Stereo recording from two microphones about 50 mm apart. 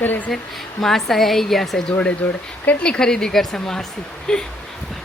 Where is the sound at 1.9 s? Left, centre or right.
Left.